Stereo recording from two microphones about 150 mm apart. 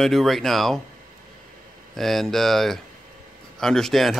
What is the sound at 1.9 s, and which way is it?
Speech, centre (ahead or behind).